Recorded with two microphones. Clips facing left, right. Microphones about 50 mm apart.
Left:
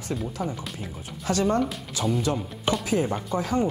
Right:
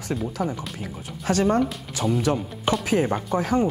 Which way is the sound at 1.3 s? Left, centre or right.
Right.